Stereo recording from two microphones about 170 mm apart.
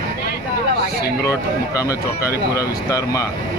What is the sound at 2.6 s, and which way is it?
Speech, 20° left (ahead or behind).